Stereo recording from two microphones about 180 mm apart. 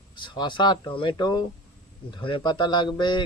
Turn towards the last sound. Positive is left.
turn(degrees=25)  # may be behind; listen again after turning